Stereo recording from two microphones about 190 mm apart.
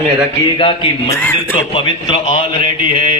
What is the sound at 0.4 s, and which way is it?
A man's voice, 25° left (ahead or behind).